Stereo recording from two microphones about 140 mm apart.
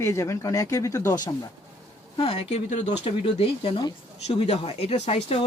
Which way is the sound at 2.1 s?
40° left (ahead or behind).